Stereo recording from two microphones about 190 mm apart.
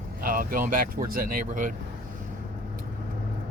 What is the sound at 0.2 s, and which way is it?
Speech, 50° right (ahead or behind).